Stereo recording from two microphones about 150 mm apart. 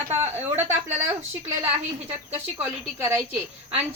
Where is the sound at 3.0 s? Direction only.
20° right (ahead or behind).